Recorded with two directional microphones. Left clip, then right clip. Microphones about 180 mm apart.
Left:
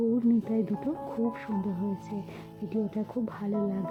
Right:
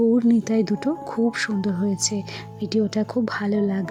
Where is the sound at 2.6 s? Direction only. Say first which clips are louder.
Right 10 dB; 30° right (ahead or behind).